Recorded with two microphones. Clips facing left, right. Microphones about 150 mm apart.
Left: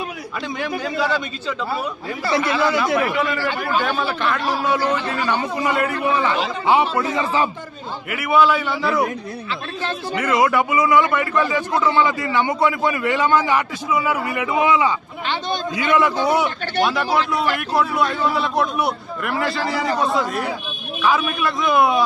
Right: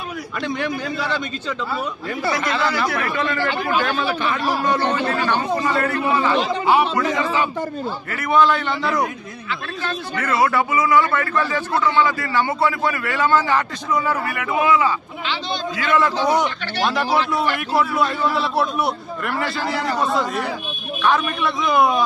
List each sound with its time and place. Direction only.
2.7 s a man's voice: 20° left (ahead or behind)
3.0 s a man's voice: 10° left (ahead or behind)
4.0 s a man's voice: 5° right (ahead or behind)
5.5 s a man's voice: 15° left (ahead or behind)
8.1 s a man's voice: 10° left (ahead or behind)
9.8 s a man's voice: 25° left (ahead or behind)
14.3 s a man's voice: 20° left (ahead or behind); by 22.0 s centre (ahead or behind)